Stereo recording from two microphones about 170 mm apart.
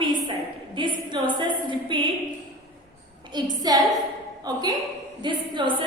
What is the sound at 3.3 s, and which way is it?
A woman's voice, 25° right (ahead or behind).